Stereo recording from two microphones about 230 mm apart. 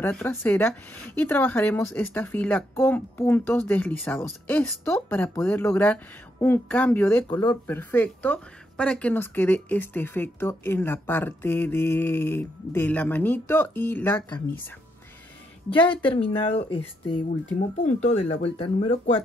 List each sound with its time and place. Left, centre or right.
0.0 s a woman's voice: centre
7.2 s a woman's voice: centre
7.6 s a woman's voice: centre
15.7 s a woman's voice: left
18.3 s a woman's voice: left